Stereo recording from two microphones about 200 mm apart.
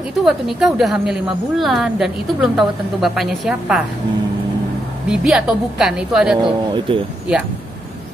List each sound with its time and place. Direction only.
0.2 s a woman's voice: centre (ahead or behind)
5.1 s a woman's voice: 5° right (ahead or behind)
6.4 s speech: 25° right (ahead or behind)